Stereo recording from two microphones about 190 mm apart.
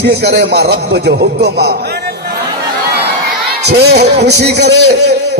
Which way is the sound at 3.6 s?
60° right (ahead or behind).